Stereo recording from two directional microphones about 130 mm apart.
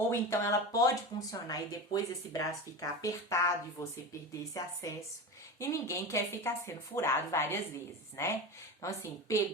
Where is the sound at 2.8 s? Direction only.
25° left (ahead or behind).